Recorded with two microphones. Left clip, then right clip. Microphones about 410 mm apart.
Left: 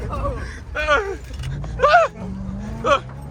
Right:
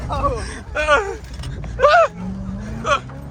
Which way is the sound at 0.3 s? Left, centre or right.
Centre.